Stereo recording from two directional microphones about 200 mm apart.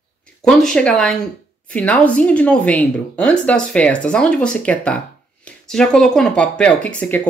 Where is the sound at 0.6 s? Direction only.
5° left (ahead or behind).